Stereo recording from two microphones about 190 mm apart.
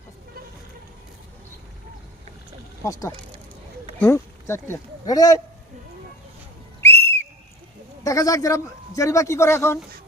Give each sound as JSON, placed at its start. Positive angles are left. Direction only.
{"t": 2.8, "sound": "speech", "side_deg": 15}
{"t": 6.8, "sound": "whistle", "side_deg": 10}
{"t": 8.0, "sound": "speech", "side_deg": 20}